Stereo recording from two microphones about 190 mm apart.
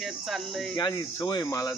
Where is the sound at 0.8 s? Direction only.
20° left (ahead or behind).